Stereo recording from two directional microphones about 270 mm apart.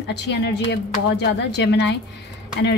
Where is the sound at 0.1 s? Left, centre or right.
Left.